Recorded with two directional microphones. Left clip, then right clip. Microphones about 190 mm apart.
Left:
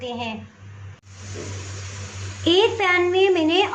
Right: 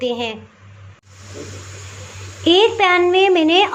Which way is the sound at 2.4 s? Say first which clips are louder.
Right 5 dB; 20° right (ahead or behind).